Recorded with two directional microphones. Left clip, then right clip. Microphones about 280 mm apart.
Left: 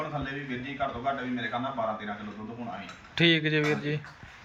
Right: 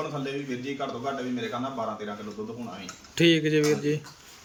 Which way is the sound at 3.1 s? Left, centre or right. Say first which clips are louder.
Right 2 dB; centre.